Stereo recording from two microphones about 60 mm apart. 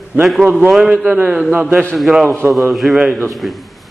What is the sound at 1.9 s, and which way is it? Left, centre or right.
A man's voice, centre.